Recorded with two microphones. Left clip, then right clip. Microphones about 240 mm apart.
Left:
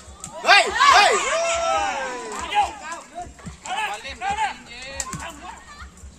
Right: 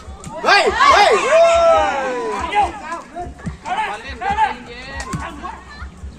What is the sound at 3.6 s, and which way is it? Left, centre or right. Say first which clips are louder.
Music: right 5 dB; left.